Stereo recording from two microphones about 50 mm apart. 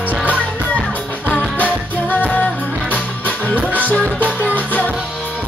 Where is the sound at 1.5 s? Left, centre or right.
Left.